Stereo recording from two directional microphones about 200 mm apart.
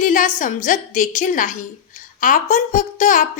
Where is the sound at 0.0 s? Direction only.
40° left (ahead or behind).